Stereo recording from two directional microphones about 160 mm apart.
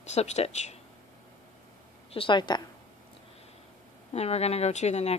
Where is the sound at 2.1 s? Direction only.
30° left (ahead or behind).